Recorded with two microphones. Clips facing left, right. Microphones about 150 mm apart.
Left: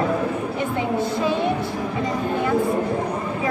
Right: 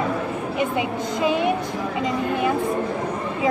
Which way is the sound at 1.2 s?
15° right (ahead or behind).